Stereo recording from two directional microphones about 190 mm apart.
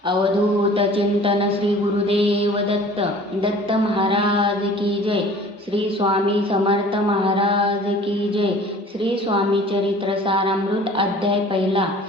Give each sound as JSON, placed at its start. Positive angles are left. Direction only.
{"t": 0.8, "sound": "a woman's voice", "side_deg": -30}
{"t": 2.0, "sound": "mantra", "side_deg": -30}
{"t": 3.4, "sound": "a woman's voice", "side_deg": -30}
{"t": 5.7, "sound": "a woman's voice", "side_deg": -30}
{"t": 10.2, "sound": "a woman's voice", "side_deg": -25}